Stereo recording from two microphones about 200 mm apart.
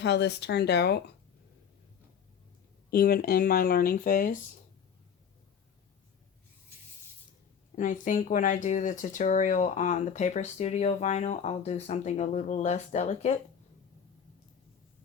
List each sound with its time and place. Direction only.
0.0 s speech: 60° left (ahead or behind)
2.9 s speech: 45° left (ahead or behind)
7.8 s speech: 40° left (ahead or behind)